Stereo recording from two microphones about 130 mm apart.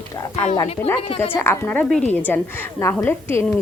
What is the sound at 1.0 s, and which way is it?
Speech, 45° left (ahead or behind).